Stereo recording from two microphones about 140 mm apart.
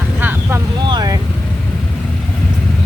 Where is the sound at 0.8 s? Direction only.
30° right (ahead or behind).